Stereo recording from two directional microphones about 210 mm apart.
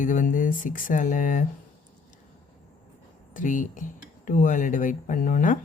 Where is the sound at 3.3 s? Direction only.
40° left (ahead or behind).